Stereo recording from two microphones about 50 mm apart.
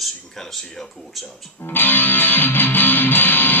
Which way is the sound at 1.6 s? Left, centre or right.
Left.